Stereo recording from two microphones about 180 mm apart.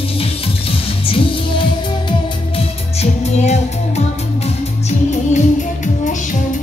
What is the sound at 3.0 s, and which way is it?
Music, 40° left (ahead or behind).